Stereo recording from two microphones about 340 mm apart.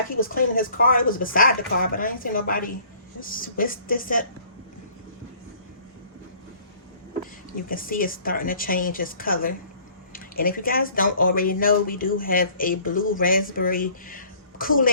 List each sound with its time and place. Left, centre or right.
0.2 s speech: left
7.5 s a woman's voice: left